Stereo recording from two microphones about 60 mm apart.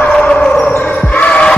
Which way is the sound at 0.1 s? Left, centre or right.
Centre.